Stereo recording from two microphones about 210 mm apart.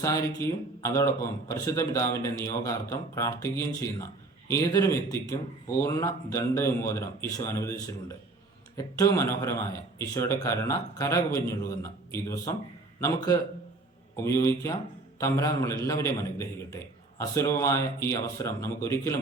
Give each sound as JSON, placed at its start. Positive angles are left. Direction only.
{"t": 0.0, "sound": "a man's voice", "side_deg": 15}